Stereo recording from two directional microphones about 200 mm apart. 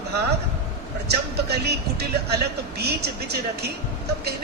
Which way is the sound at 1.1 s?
55° right (ahead or behind).